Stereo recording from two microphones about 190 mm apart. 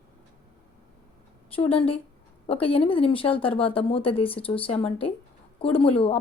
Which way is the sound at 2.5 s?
30° left (ahead or behind).